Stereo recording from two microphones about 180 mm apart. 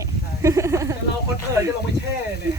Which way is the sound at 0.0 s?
15° right (ahead or behind).